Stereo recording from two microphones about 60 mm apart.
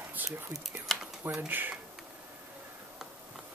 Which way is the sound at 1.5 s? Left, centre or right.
Right.